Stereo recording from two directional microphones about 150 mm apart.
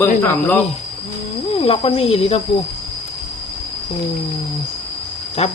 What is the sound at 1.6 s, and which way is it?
Speech, 40° left (ahead or behind).